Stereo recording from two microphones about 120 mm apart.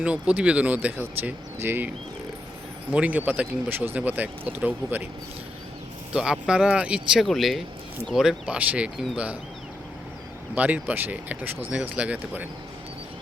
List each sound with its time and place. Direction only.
0.0 s speech: 10° right (ahead or behind)
2.9 s speech: 10° right (ahead or behind)
6.1 s speech: 5° right (ahead or behind)
10.5 s speech: 10° right (ahead or behind)